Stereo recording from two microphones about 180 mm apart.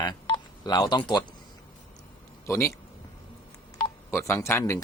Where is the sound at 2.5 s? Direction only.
15° left (ahead or behind).